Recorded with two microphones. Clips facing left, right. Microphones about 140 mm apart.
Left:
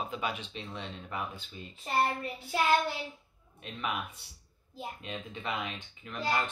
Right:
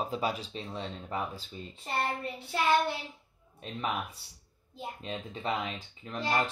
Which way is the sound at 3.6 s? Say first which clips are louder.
Right 2 dB; 35° right (ahead or behind).